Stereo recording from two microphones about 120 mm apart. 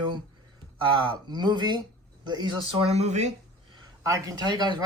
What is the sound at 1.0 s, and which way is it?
Speech, 35° right (ahead or behind).